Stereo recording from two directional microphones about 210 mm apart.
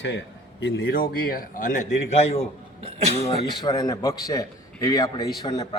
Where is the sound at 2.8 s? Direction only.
30° right (ahead or behind).